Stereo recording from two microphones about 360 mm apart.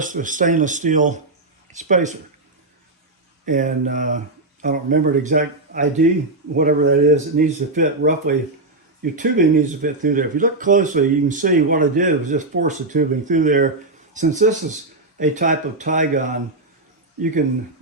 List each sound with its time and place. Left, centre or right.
0.0 s speech: right
3.4 s speech: right